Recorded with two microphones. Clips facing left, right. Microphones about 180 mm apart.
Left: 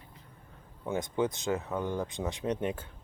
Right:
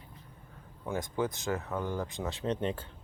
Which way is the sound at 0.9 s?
20° left (ahead or behind).